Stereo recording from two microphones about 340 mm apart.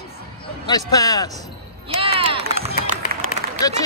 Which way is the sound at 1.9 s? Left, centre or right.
Centre.